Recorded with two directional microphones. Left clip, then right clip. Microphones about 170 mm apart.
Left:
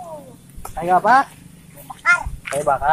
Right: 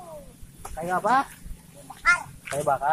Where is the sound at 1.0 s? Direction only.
50° left (ahead or behind).